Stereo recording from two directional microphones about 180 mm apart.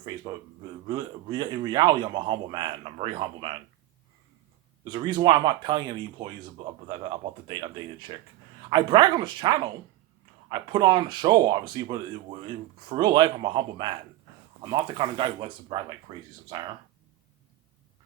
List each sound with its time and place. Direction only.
0.9 s speech: 25° right (ahead or behind)
4.9 s speech: 25° right (ahead or behind)